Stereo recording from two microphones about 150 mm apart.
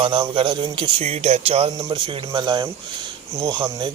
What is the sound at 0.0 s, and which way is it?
Speech, 35° right (ahead or behind).